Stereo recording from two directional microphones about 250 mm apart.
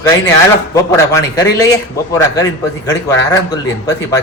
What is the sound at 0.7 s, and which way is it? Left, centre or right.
Speech, centre.